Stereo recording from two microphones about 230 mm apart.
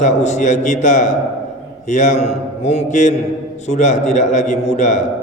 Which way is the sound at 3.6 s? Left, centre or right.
Left.